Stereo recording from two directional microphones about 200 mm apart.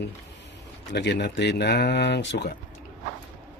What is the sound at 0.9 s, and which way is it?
Speech, 60° left (ahead or behind).